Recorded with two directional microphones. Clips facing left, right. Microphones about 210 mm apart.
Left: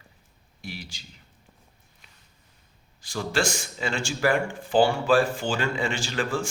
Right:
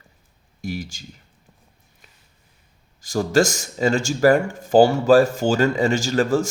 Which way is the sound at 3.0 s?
45° right (ahead or behind).